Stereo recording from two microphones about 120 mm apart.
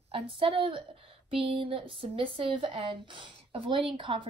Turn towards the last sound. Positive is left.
turn(degrees=-45)  # may be behind; listen again after turning